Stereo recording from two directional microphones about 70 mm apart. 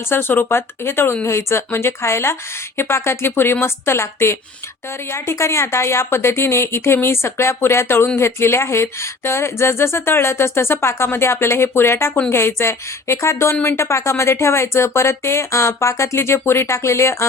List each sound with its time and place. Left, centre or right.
0.1 s a woman's voice: left